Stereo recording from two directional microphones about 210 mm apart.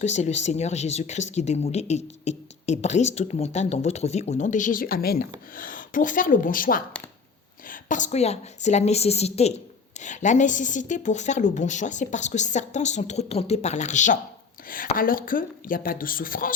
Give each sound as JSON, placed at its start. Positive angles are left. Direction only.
{"t": 0.0, "sound": "speech", "side_deg": 35}